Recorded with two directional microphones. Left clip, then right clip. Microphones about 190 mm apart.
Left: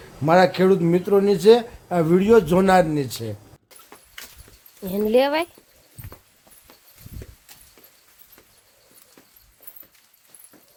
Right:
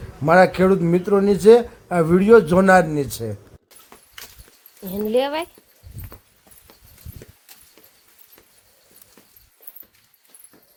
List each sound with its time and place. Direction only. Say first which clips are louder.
0.3 s speech: right 2 dB; 10° right (ahead or behind)
4.2 s a sound: even; 30° right (ahead or behind)
4.8 s speech: left 2 dB; 35° left (ahead or behind)